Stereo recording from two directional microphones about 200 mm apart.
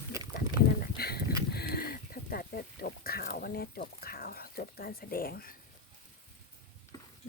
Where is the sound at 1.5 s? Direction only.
50° left (ahead or behind).